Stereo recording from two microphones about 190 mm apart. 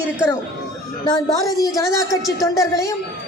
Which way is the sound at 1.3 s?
20° left (ahead or behind).